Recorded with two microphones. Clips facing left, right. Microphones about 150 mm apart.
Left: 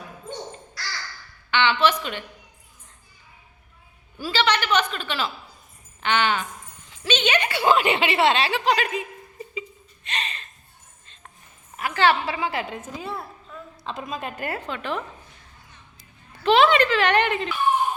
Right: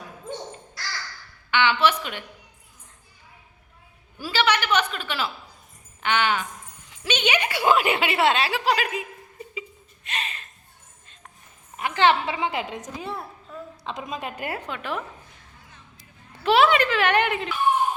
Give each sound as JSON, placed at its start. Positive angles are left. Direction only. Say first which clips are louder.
{"t": 1.5, "sound": "a woman's voice", "louder": "even", "side_deg": -10}
{"t": 4.2, "sound": "a woman's voice", "louder": "even", "side_deg": -10}
{"t": 9.6, "sound": "a sound", "louder": "left 3 dB", "side_deg": -5}
{"t": 11.8, "sound": "a woman's voice", "louder": "even", "side_deg": -20}
{"t": 16.4, "sound": "a woman's voice", "louder": "left 1 dB", "side_deg": -10}